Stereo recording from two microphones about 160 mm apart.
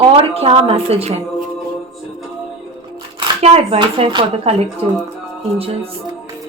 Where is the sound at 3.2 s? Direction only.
40° right (ahead or behind).